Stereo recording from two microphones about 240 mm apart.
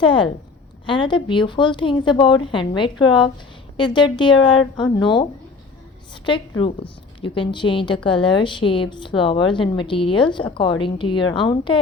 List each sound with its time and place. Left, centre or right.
0.0 s a woman's voice: centre
7.2 s a woman's voice: centre